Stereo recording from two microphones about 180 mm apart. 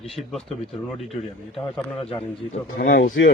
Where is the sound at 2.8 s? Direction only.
75° left (ahead or behind).